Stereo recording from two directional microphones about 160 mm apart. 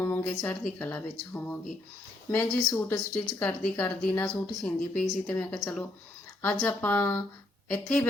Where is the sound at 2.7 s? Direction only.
20° left (ahead or behind).